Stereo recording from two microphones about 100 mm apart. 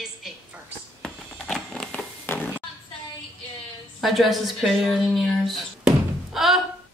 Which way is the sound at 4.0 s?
Centre (ahead or behind).